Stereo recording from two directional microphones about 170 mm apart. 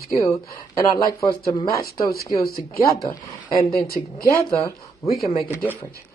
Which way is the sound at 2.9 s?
20° left (ahead or behind).